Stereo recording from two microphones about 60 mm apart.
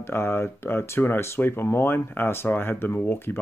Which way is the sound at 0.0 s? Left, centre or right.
Left.